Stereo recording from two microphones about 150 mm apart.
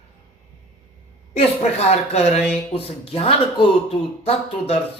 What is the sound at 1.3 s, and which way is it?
Mantra, 45° left (ahead or behind).